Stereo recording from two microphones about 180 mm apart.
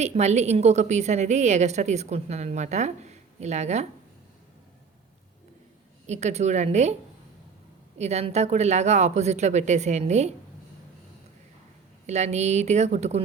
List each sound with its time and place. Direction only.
0.0 s a woman's voice: 40° right (ahead or behind)
6.1 s a woman's voice: 40° right (ahead or behind)
7.9 s a woman's voice: 40° right (ahead or behind)
12.0 s a woman's voice: 40° right (ahead or behind)